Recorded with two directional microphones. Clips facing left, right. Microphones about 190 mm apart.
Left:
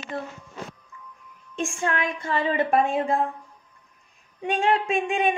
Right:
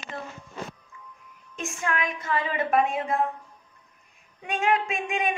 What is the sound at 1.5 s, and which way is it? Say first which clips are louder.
A woman's voice: left 3 dB; 30° left (ahead or behind).